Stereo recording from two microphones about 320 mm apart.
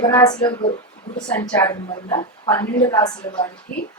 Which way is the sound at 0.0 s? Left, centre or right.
Centre.